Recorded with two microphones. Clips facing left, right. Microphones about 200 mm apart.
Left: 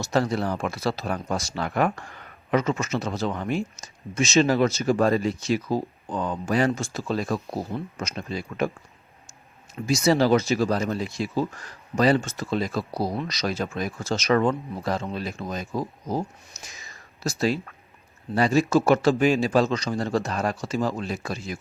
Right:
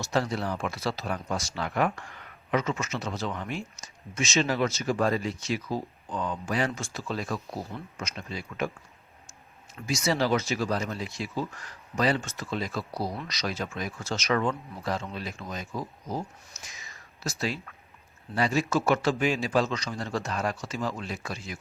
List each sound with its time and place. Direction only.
0.0 s a man's voice: 45° left (ahead or behind)
9.8 s a man's voice: 35° left (ahead or behind)
17.2 s a man's voice: 40° left (ahead or behind)